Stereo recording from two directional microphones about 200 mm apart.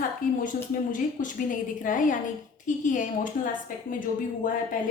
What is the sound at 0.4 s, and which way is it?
A woman's voice, 40° left (ahead or behind).